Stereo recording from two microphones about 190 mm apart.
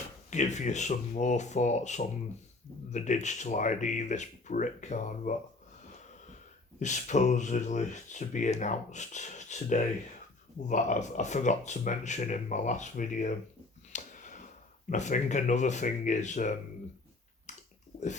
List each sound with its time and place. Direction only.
0.3 s speech: 40° left (ahead or behind)
5.9 s wheeze: 40° left (ahead or behind)
6.7 s speech: 40° left (ahead or behind)
13.9 s a sound: 40° left (ahead or behind)
14.8 s speech: 40° left (ahead or behind)
17.5 s bathtub: 40° left (ahead or behind)